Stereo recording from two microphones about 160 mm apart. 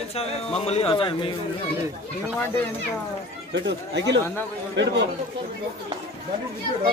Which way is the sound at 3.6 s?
90° right.